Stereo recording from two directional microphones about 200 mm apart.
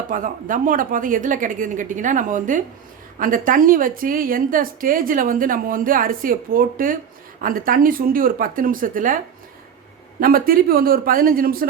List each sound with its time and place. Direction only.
0.1 s a woman's voice: 40° right (ahead or behind)
10.2 s a woman's voice: 45° right (ahead or behind)